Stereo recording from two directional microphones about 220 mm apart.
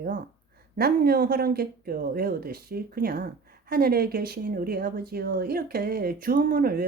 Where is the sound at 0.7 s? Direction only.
45° right (ahead or behind).